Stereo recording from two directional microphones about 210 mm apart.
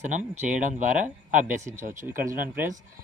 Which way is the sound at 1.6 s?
15° right (ahead or behind).